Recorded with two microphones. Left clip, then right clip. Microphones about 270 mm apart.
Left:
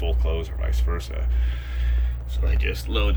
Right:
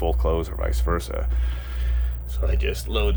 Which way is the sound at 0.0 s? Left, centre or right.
Centre.